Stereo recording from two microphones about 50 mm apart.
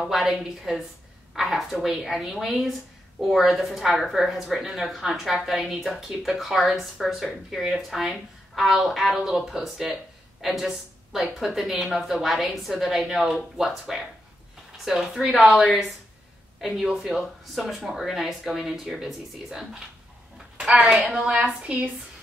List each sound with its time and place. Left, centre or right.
0.1 s a woman's voice: centre
15.3 s a woman's voice: centre
16.9 s a woman's voice: centre
20.5 s speech: right
21.5 s a woman's voice: right